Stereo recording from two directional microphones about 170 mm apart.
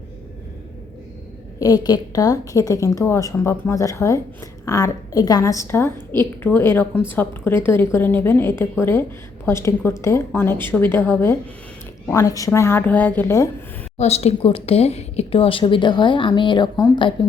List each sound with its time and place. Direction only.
1.5 s a woman's voice: 20° left (ahead or behind)
14.0 s speech: 40° left (ahead or behind)